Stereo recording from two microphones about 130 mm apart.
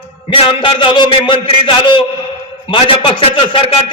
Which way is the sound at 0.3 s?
40° left (ahead or behind).